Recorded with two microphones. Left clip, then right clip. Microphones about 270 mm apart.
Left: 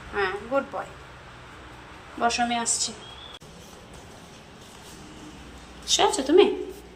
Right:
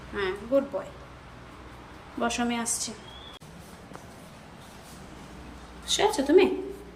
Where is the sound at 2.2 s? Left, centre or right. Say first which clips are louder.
Left 5 dB; centre.